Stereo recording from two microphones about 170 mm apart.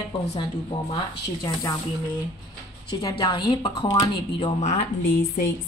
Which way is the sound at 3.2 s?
25° left (ahead or behind).